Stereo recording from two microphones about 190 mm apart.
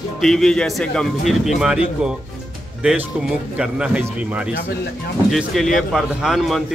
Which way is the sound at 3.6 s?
5° right (ahead or behind).